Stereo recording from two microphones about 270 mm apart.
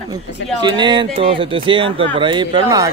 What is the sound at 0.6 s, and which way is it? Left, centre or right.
Speech, centre.